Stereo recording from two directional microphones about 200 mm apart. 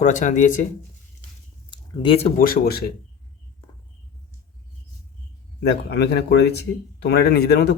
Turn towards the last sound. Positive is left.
turn(degrees=55)  # may be behind; listen again after turning